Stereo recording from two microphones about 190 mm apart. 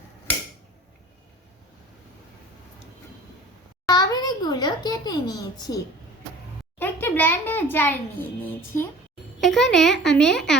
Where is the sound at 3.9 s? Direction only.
20° left (ahead or behind).